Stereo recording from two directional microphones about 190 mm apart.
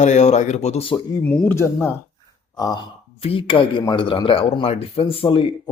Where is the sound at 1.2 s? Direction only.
10° left (ahead or behind).